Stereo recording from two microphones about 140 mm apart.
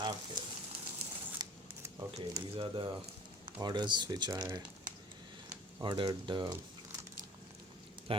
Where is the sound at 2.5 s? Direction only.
40° right (ahead or behind).